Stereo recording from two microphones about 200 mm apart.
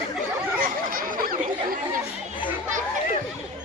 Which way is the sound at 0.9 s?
45° right (ahead or behind).